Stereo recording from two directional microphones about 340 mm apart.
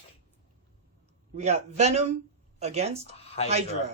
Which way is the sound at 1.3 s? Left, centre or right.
Centre.